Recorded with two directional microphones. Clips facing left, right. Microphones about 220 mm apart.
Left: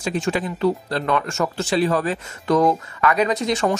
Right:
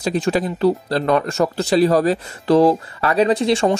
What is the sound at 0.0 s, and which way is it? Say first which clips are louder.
Speech: right 4 dB; 35° right (ahead or behind).